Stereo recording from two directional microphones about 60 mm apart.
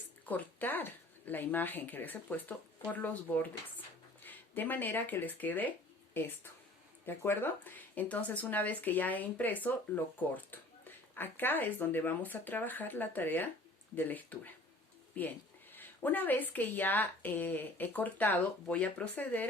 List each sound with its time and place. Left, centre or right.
0.3 s speech: left
6.1 s speech: left